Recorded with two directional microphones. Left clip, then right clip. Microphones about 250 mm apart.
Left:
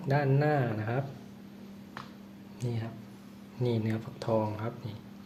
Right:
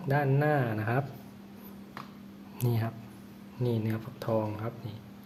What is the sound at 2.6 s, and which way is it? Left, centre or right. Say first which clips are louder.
Speech: right 5 dB; right.